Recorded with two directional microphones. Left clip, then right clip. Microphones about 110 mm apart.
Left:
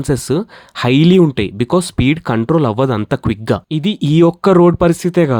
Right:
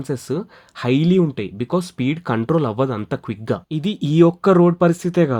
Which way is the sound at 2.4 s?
30° left (ahead or behind).